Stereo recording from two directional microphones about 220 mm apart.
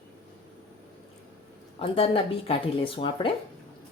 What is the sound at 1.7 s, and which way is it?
Speech, 25° left (ahead or behind).